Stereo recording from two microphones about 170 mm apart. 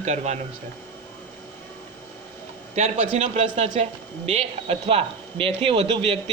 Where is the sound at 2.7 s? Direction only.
40° right (ahead or behind).